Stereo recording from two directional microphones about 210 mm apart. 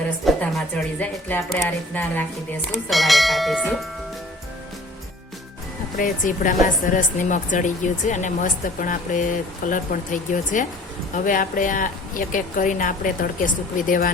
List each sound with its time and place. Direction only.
0.3 s speech: 5° left (ahead or behind)
6.0 s a woman's voice: 40° left (ahead or behind)